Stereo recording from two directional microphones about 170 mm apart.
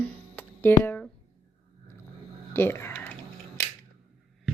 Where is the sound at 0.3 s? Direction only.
10° left (ahead or behind).